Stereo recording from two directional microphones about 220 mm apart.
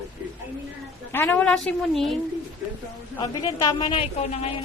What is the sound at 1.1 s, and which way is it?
A woman's voice, 10° left (ahead or behind).